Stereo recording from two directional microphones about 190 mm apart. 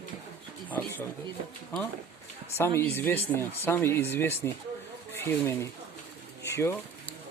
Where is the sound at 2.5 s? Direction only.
15° left (ahead or behind).